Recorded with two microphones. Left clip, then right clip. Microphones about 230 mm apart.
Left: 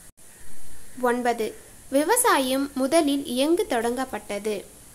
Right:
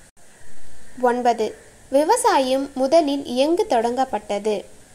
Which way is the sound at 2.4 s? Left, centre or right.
Left.